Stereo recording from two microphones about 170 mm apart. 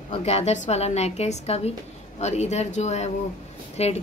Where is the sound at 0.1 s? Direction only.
35° left (ahead or behind).